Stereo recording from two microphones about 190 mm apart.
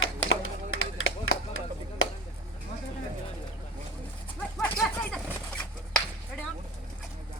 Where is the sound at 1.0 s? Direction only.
90° left.